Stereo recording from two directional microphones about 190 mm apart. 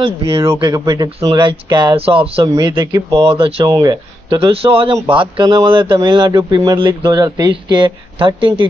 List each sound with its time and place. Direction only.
0.6 s speech: 20° right (ahead or behind)